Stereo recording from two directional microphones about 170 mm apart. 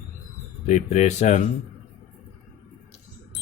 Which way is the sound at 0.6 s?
45° left (ahead or behind).